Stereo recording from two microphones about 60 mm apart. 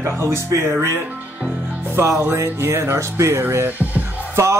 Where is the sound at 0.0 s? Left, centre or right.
Right.